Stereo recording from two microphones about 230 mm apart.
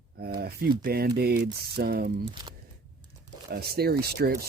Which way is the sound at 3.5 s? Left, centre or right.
Right.